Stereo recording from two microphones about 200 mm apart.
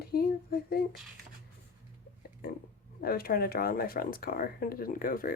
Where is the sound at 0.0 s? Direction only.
50° left (ahead or behind).